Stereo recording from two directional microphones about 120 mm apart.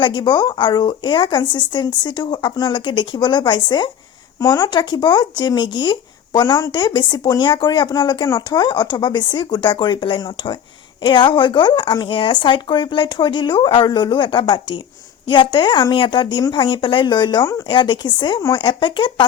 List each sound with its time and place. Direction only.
0.0 s speech: 40° left (ahead or behind)